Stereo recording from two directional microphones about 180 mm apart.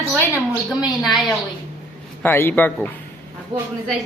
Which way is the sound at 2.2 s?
10° left (ahead or behind).